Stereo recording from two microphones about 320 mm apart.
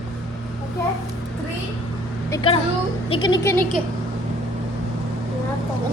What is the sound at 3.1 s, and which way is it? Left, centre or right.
Speech, centre.